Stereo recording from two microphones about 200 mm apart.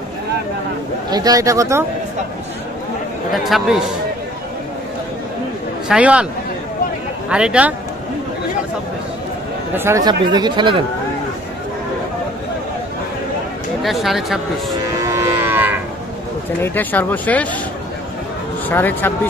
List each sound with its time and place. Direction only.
1.1 s speech: 20° right (ahead or behind)
3.4 s speech: centre (ahead or behind)
5.9 s speech: 5° right (ahead or behind)
7.2 s speech: 5° right (ahead or behind)
9.8 s speech: 15° right (ahead or behind)
13.8 s speech: centre (ahead or behind)
15.0 s moo: 15° right (ahead or behind)
16.6 s speech: 10° left (ahead or behind)
18.7 s speech: 10° left (ahead or behind)